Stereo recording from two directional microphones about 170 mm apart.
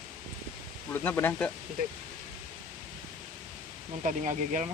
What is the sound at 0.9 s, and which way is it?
Speech, 10° left (ahead or behind).